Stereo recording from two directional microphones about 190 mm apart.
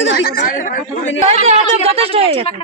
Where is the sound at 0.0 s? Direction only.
65° left (ahead or behind).